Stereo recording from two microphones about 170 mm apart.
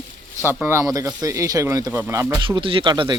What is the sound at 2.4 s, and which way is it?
Speech, 30° right (ahead or behind).